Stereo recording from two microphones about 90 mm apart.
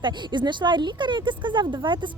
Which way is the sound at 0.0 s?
55° right (ahead or behind).